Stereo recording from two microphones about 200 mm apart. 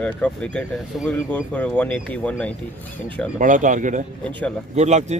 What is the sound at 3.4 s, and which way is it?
Speech, 40° right (ahead or behind).